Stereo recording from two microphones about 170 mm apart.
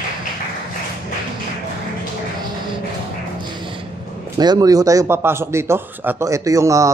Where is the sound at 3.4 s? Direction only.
25° right (ahead or behind).